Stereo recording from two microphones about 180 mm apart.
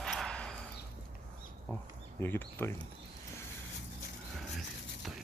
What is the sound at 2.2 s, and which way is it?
Speech, 10° left (ahead or behind).